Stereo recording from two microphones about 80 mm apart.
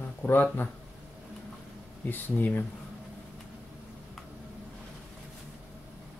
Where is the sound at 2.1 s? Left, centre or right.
Left.